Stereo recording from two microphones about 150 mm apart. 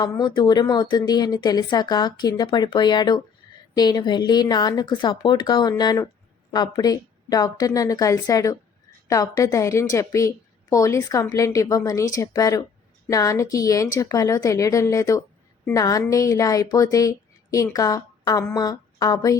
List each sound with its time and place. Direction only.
0.0 s a woman's voice: 30° left (ahead or behind)